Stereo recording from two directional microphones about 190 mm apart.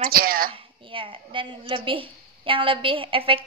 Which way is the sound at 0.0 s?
50° right (ahead or behind).